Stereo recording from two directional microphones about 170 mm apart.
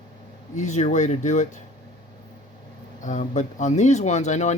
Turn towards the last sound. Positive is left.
turn(degrees=45)  # may be behind; listen again after turning